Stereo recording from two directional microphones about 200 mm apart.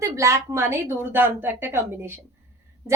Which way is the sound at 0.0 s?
15° right (ahead or behind).